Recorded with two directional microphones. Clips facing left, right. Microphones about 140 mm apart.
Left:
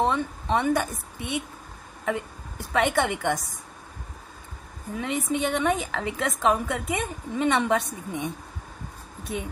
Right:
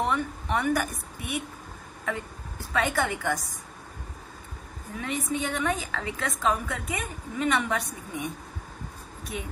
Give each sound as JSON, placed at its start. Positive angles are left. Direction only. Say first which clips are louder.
{"t": 0.0, "sound": "a woman's voice", "louder": "left 3 dB", "side_deg": 25}
{"t": 2.7, "sound": "a woman's voice", "louder": "left 3 dB", "side_deg": 20}
{"t": 5.0, "sound": "a woman's voice", "louder": "left 3 dB", "side_deg": 25}